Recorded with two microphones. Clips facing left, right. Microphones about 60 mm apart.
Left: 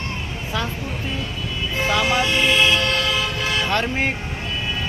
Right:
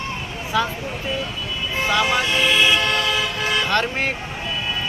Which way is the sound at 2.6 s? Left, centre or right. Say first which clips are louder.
Right 1 dB; right.